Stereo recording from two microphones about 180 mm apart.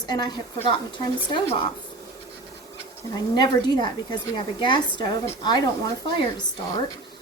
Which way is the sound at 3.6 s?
25° left (ahead or behind).